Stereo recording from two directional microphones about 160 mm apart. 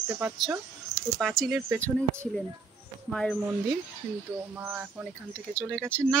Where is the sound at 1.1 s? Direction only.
Centre (ahead or behind).